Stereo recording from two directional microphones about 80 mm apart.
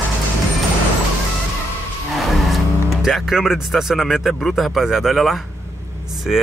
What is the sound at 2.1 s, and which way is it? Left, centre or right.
Speech, centre.